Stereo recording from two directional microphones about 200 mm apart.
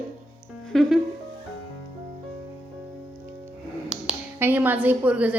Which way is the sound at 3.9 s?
5° right (ahead or behind).